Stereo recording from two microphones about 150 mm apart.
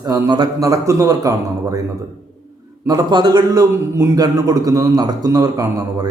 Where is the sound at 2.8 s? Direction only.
25° right (ahead or behind).